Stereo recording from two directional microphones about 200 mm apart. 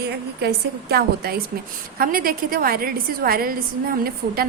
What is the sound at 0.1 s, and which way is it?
A woman's voice, 55° right (ahead or behind).